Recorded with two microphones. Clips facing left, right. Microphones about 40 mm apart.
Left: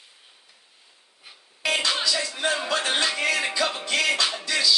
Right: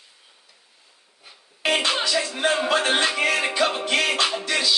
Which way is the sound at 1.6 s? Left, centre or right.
Right.